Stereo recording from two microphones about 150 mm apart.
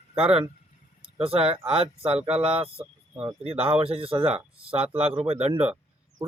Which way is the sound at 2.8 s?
10° right (ahead or behind).